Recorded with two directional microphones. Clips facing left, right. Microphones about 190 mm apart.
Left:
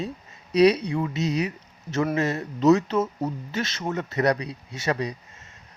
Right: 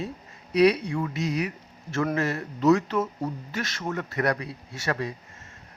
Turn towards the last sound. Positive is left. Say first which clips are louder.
# left 3 dB
turn(degrees=20)  # may be behind; listen again after turning